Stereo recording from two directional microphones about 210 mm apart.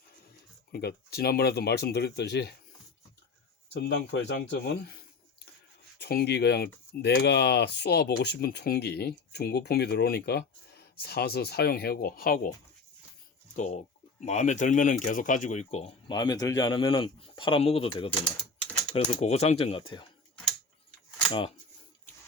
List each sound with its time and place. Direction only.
0.7 s speech: 50° left (ahead or behind)
3.7 s speech: 55° left (ahead or behind)
13.6 s speech: 35° left (ahead or behind)
16.1 s a man's voice: 20° left (ahead or behind)
19.2 s a man's voice: 30° left (ahead or behind)
21.2 s speech: 25° left (ahead or behind)